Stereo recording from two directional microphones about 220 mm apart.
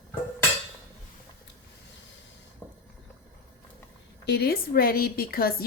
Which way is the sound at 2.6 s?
10° left (ahead or behind).